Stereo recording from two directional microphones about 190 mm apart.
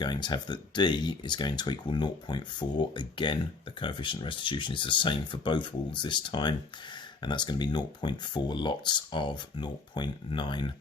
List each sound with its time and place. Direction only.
0.0 s speech: 25° left (ahead or behind)